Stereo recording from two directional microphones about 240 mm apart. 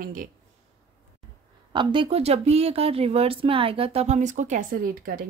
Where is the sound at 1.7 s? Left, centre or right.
Centre.